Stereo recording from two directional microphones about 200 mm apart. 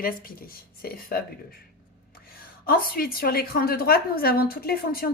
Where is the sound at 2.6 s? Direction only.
45° left (ahead or behind).